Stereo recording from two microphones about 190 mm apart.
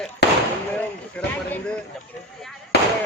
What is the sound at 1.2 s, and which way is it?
Speech, 5° left (ahead or behind).